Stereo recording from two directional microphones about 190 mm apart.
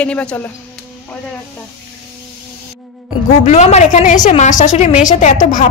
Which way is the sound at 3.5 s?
35° left (ahead or behind).